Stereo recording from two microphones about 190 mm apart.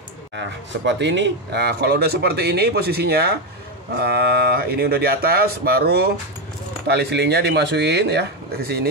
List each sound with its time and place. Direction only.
0.4 s speech: 70° right (ahead or behind)